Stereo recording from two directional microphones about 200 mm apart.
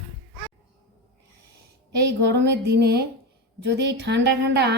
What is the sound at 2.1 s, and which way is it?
A woman's voice, 60° right (ahead or behind).